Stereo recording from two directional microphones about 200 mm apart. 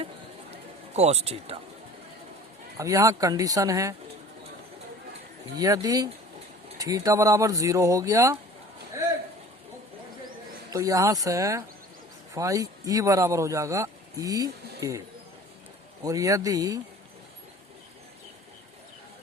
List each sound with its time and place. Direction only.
0.9 s speech: 30° right (ahead or behind)
2.7 s speech: 15° right (ahead or behind)
5.5 s speech: 20° right (ahead or behind)
10.7 s speech: 15° right (ahead or behind)
16.0 s speech: 15° right (ahead or behind)